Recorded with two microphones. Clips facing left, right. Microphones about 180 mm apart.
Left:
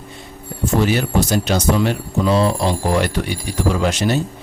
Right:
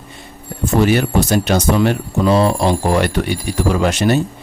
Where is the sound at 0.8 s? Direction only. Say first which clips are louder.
Right 4 dB; 60° right (ahead or behind).